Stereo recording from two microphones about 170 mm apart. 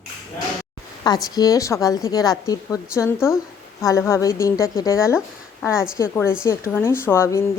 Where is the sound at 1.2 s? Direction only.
20° left (ahead or behind).